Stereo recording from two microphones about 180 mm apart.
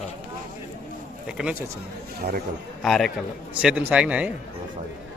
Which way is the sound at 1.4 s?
5° right (ahead or behind).